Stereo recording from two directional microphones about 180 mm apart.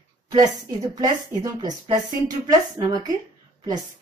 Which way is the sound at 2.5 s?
20° right (ahead or behind).